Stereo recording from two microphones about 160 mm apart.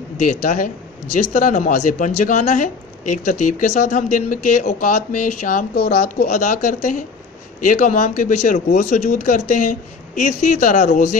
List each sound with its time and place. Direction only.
0.2 s speech: 50° left (ahead or behind)